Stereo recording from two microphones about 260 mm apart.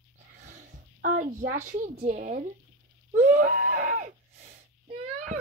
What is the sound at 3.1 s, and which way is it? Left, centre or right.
Wheeze, right.